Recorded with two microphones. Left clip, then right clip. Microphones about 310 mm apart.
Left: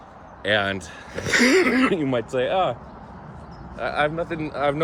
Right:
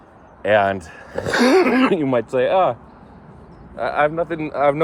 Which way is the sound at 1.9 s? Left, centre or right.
Right.